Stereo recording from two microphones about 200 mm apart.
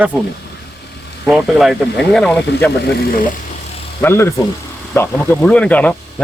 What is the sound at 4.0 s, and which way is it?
Speech, 10° left (ahead or behind).